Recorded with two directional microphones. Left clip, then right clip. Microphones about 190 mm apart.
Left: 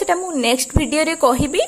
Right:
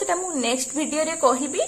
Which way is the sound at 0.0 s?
30° left (ahead or behind).